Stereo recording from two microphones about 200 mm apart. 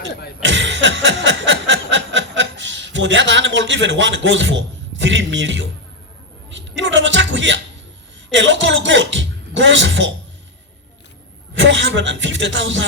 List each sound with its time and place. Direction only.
0.4 s a sound: 65° right (ahead or behind)
8.4 s speech: 65° right (ahead or behind)
11.5 s speech: 65° right (ahead or behind)